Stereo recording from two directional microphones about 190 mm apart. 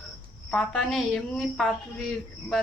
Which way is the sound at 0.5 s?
Centre (ahead or behind).